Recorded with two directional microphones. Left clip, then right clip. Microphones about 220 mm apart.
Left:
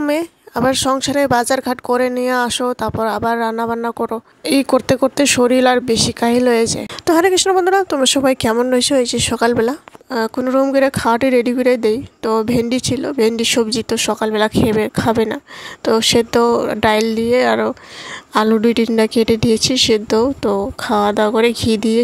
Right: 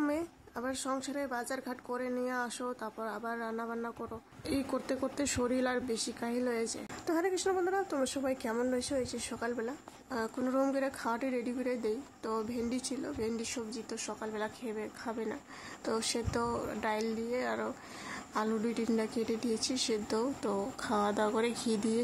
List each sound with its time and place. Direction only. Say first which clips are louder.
0.0 s speech: left 16 dB; 40° left (ahead or behind)